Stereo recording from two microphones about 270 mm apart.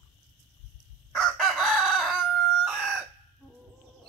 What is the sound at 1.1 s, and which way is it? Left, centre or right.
Chicken, centre.